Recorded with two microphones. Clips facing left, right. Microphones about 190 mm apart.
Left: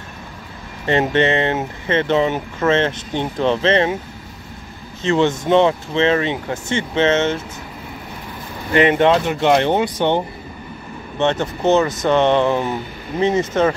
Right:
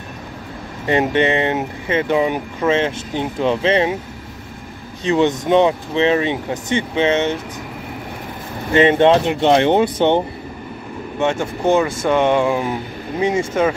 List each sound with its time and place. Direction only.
0.8 s speech: 15° right (ahead or behind)
5.0 s speech: 15° right (ahead or behind)
8.7 s speech: 25° right (ahead or behind)
11.1 s speech: 10° right (ahead or behind)